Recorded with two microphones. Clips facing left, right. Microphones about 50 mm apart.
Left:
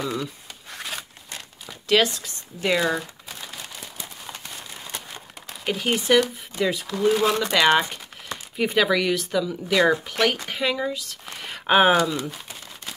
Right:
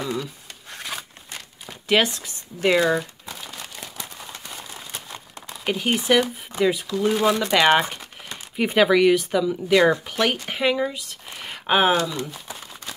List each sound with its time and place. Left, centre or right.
0.1 s a sound: centre
1.7 s a sound: centre
2.2 s speech: centre
2.8 s speech: centre
5.7 s speech: centre
11.4 s speech: centre